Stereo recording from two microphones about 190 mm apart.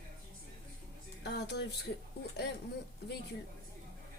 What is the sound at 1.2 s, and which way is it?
Speech, 60° left (ahead or behind).